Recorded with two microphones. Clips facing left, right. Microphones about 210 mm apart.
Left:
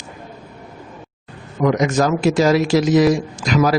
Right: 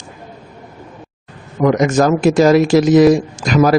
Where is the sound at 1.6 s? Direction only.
50° right (ahead or behind).